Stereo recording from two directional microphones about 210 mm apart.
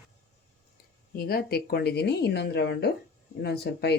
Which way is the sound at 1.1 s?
45° left (ahead or behind).